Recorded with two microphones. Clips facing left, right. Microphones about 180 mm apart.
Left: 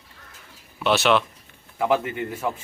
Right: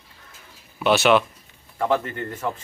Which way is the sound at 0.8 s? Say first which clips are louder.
Right 2 dB; 5° right (ahead or behind).